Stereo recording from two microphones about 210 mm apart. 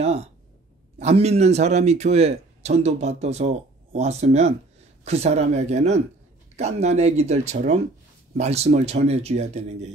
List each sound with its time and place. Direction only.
0.0 s a man's voice: 30° right (ahead or behind)